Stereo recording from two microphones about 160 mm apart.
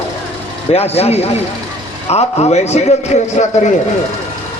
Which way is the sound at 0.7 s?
40° left (ahead or behind).